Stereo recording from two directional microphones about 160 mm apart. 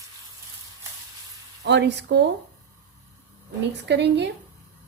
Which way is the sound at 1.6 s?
90° right.